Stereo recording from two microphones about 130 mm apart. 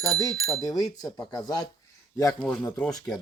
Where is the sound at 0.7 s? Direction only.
30° left (ahead or behind).